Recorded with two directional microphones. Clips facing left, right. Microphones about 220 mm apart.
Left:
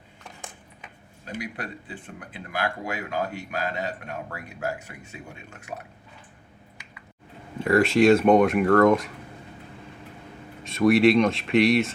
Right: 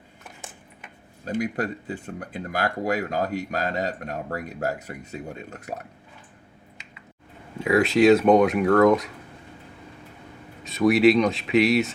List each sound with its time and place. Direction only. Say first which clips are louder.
1.2 s speech: right 8 dB; 45° right (ahead or behind)
7.6 s speech: right 1 dB; centre (ahead or behind)
10.6 s speech: even; centre (ahead or behind)